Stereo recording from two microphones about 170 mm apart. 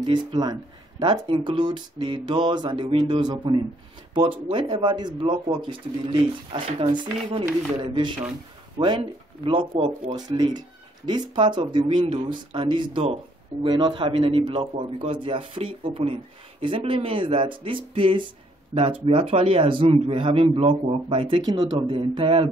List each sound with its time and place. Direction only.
0.0 s speech: 25° right (ahead or behind)
9.4 s a man's voice: 30° right (ahead or behind)
10.1 s a man's voice: 25° right (ahead or behind)